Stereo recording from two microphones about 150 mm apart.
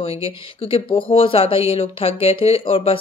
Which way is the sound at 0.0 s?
40° left (ahead or behind).